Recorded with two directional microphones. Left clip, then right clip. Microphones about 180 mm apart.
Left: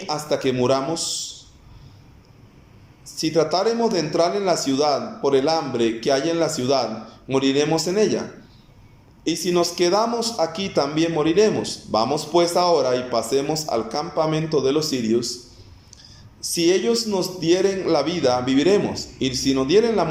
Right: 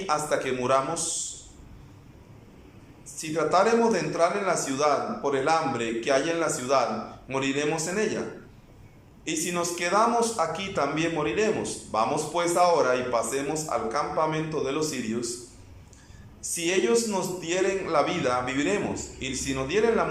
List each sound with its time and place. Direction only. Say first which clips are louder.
0.1 s speech: left 4 dB; 25° left (ahead or behind)
3.2 s speech: left 3 dB; 30° left (ahead or behind)
9.2 s speech: left 8 dB; 25° left (ahead or behind)
16.6 s speech: left 5 dB; 25° left (ahead or behind)